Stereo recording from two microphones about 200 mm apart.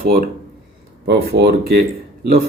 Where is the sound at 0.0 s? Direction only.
50° right (ahead or behind).